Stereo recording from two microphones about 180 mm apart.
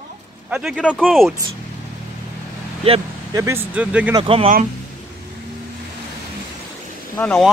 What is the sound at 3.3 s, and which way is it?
Speech, 15° right (ahead or behind).